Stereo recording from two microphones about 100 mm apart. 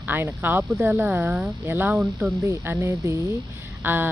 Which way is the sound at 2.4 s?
25° right (ahead or behind).